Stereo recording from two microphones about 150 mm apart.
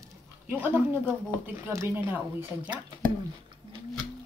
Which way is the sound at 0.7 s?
15° right (ahead or behind).